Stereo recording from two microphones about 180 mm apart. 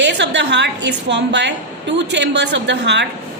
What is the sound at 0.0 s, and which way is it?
A woman's voice, 75° right (ahead or behind).